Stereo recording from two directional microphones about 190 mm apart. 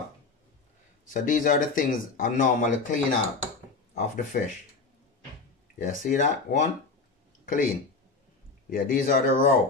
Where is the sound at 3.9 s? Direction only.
45° left (ahead or behind).